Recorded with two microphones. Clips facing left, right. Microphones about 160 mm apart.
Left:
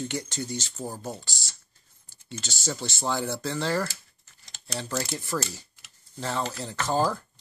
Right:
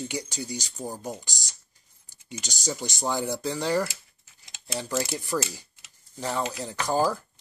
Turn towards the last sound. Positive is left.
turn(degrees=-10)  # may be behind; listen again after turning